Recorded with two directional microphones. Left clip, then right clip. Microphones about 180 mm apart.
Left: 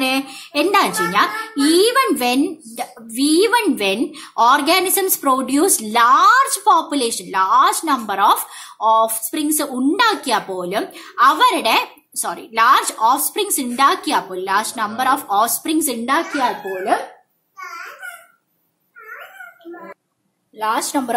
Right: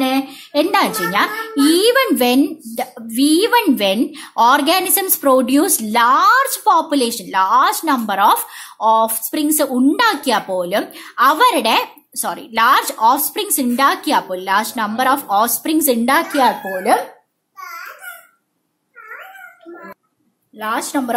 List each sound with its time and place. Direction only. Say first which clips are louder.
0.0 s a child's voice: right 1 dB; 25° right (ahead or behind); by 17.0 s 50° right (ahead or behind)
20.5 s a woman's voice: left 1 dB; 5° right (ahead or behind)